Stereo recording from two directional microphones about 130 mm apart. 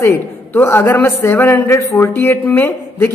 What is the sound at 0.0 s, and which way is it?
A man's voice, 15° left (ahead or behind).